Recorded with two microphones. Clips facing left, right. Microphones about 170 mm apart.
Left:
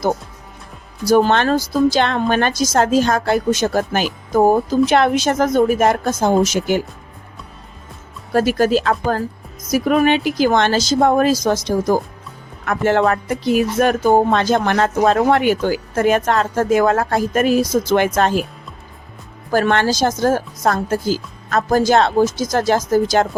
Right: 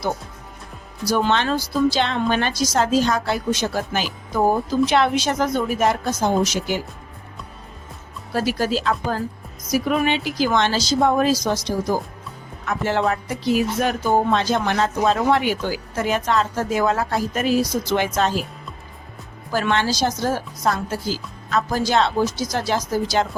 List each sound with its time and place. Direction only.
1.0 s a woman's voice: 50° left (ahead or behind)
8.3 s a woman's voice: 50° left (ahead or behind)
19.5 s a woman's voice: 50° left (ahead or behind)